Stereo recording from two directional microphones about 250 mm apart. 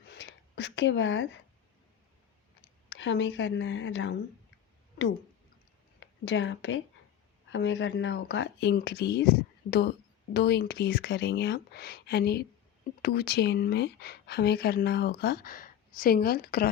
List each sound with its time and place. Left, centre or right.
0.0 s a sound: left
2.9 s speech: left
6.0 s speech: left